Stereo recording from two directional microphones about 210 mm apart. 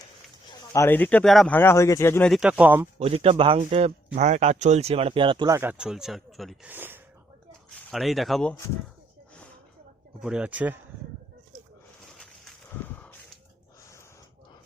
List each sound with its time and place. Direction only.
0.7 s speech: 10° left (ahead or behind)
2.3 s speech: 5° right (ahead or behind)
3.0 s speech: 25° right (ahead or behind); by 8.5 s centre (ahead or behind)
10.2 s speech: 5° right (ahead or behind)
12.8 s snort: 10° left (ahead or behind)